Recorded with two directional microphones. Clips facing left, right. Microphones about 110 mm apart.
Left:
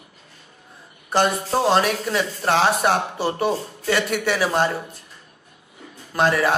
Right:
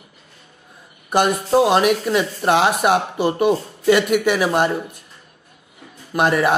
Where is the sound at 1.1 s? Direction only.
15° right (ahead or behind).